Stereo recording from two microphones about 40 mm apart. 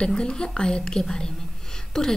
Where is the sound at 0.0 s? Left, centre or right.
Left.